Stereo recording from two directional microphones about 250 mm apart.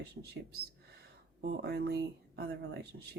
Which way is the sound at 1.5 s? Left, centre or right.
Right.